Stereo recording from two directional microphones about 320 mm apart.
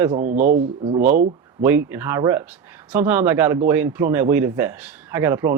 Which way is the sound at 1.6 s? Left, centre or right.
Centre.